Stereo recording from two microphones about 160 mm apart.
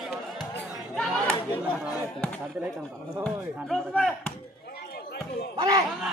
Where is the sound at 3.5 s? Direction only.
Centre (ahead or behind).